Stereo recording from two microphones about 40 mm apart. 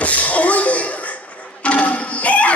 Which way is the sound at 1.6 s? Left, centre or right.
Left.